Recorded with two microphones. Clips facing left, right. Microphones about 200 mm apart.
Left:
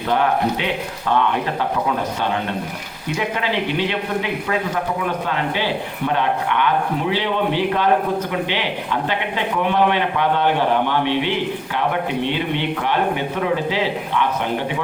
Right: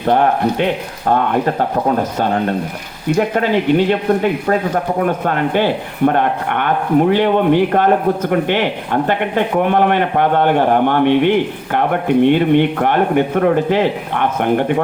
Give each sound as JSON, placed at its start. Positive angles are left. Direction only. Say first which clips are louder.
{"t": 0.0, "sound": "speech", "louder": "right 5 dB", "side_deg": -45}